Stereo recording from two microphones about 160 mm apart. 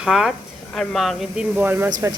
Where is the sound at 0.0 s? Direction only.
5° right (ahead or behind).